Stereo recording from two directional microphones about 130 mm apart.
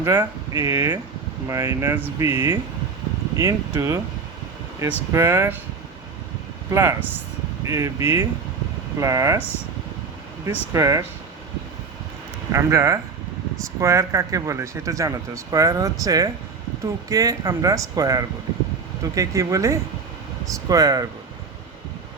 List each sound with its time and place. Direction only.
0.0 s speech: 25° right (ahead or behind)
5.1 s speech: 20° right (ahead or behind)
6.7 s speech: 20° right (ahead or behind)
10.7 s speech: 25° right (ahead or behind)
12.5 s speech: 20° right (ahead or behind)